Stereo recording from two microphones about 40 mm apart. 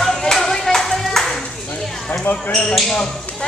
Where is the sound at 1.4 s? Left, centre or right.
Left.